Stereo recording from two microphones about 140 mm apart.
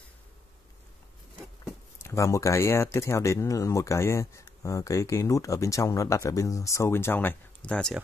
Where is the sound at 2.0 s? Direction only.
20° left (ahead or behind); by 8.0 s 5° left (ahead or behind).